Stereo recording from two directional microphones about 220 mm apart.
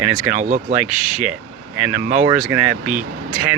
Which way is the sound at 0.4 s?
35° right (ahead or behind).